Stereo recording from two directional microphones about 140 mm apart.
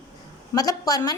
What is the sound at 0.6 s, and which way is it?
Speech, 25° left (ahead or behind).